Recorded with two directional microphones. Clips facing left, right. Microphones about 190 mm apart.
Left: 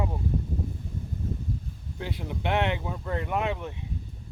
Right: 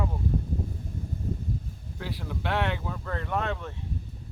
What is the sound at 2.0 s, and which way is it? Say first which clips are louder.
Speech: left 2 dB; 20° left (ahead or behind).